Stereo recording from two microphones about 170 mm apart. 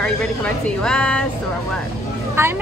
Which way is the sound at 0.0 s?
5° left (ahead or behind).